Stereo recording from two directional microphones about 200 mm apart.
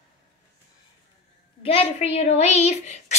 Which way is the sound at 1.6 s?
30° left (ahead or behind).